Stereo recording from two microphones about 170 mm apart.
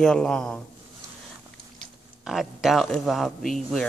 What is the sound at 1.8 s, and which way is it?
Speech, centre (ahead or behind).